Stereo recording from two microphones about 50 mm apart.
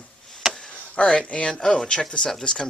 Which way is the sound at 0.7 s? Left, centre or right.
Left.